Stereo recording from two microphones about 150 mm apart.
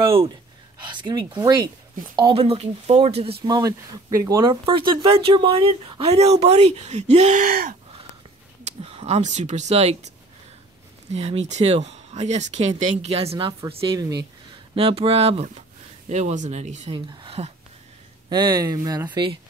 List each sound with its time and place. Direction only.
0.8 s speech: 30° right (ahead or behind)
2.1 s speech: 35° right (ahead or behind)
3.4 s speech: 25° right (ahead or behind)
4.6 s speech: 35° right (ahead or behind); by 7.7 s 65° right (ahead or behind)
8.6 s speech: 45° right (ahead or behind)
14.8 s speech: 40° right (ahead or behind)
16.9 s a sound: 30° right (ahead or behind)
18.3 s speech: 30° right (ahead or behind)